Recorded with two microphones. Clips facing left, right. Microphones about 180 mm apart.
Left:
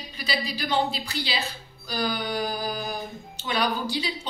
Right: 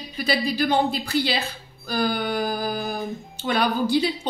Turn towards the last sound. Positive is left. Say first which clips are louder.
# right 6 dB
turn(degrees=-55)  # may be behind; listen again after turning